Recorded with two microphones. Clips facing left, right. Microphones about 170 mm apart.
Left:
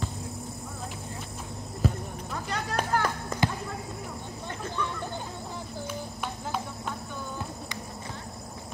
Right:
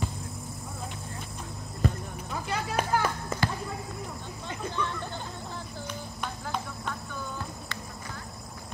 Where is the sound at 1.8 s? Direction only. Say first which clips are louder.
Left 1 dB; centre (ahead or behind).